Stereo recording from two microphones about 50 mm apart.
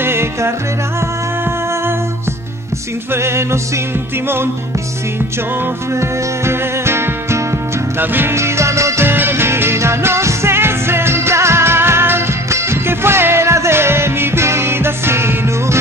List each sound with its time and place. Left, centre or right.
0.0 s music: right
3.1 s music: right
5.9 s music: right
8.0 s music: right
8.4 s music: right
9.0 s music: right